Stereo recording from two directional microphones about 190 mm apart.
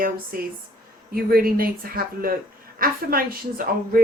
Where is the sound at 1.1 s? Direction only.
50° right (ahead or behind).